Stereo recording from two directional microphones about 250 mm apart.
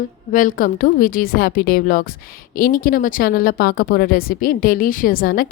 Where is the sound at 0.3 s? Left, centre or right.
Left.